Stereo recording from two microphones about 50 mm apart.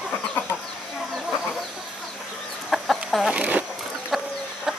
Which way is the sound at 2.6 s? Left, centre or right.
Centre.